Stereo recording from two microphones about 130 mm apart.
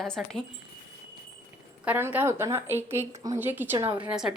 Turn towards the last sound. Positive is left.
turn(degrees=-5)  # may be behind; listen again after turning